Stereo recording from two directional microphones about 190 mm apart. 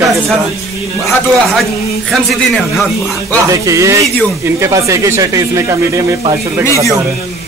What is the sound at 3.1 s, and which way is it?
Speech, 15° right (ahead or behind).